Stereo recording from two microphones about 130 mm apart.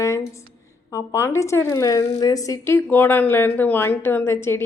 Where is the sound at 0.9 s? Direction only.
20° left (ahead or behind).